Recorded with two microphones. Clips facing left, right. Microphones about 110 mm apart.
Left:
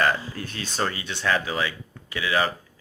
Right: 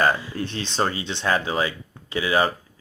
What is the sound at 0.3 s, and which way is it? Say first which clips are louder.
Speech: right 4 dB; 30° right (ahead or behind).